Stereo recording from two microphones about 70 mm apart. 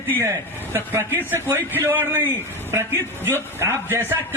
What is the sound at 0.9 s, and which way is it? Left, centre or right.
A man's voice, right.